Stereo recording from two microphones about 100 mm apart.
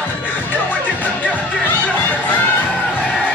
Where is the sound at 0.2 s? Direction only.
20° left (ahead or behind).